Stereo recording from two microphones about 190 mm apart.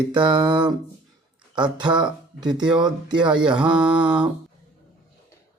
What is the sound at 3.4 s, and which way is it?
Mantra, 5° right (ahead or behind).